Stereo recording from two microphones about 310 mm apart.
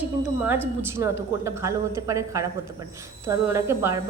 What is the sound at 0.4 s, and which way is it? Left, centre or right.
Speech, centre.